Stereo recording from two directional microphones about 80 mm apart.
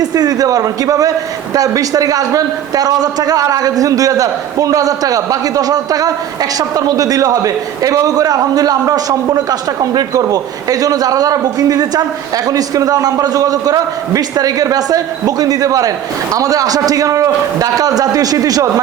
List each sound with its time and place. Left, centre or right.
0.0 s a man's voice: right